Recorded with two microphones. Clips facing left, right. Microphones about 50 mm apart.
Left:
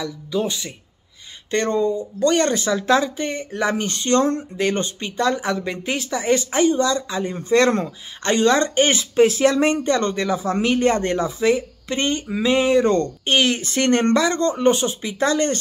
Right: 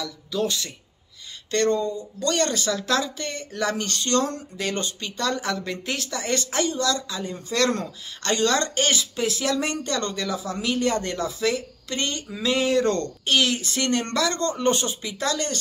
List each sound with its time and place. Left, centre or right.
0.0 s speech: centre